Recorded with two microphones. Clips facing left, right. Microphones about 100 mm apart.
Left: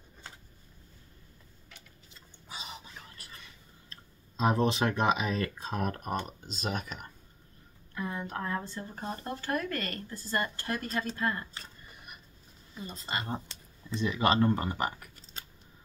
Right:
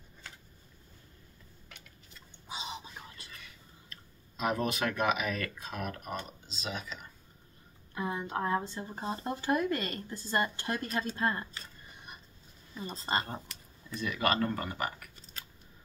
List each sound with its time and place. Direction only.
2.4 s whispering: 20° right (ahead or behind)
3.9 s speech: 30° left (ahead or behind); by 7.1 s 55° left (ahead or behind)
7.9 s speech: 20° right (ahead or behind)
12.7 s speech: 30° right (ahead or behind)
13.8 s speech: 20° left (ahead or behind)